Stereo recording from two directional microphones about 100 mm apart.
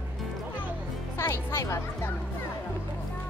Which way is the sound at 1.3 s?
25° left (ahead or behind).